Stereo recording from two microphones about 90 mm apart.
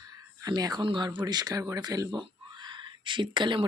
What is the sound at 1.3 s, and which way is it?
Speech, 45° right (ahead or behind).